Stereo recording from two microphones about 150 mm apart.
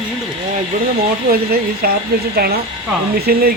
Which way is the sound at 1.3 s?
90° right.